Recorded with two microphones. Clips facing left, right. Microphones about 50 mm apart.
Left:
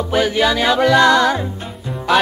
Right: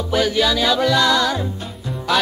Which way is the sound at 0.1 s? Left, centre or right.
Left.